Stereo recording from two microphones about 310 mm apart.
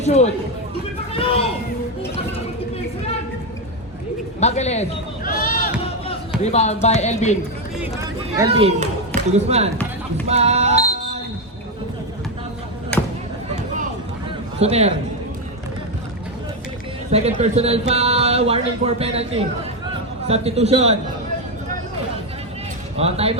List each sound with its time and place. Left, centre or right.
0.0 s speech: left
4.4 s a sound: left
6.4 s speech: left
8.4 s a man's voice: centre
10.2 s music: centre
14.6 s a man's voice: right
17.1 s a man's voice: centre
23.0 s speech: centre